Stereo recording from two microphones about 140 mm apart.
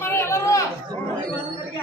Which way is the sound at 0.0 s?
15° left (ahead or behind).